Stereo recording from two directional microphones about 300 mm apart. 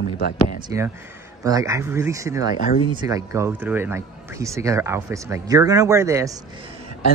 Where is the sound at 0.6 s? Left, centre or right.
Centre.